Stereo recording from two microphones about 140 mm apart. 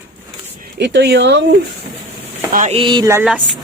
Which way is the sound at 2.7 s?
35° right (ahead or behind).